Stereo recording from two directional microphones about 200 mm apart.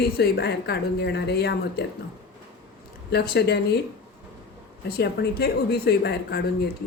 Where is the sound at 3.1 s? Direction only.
50° left (ahead or behind).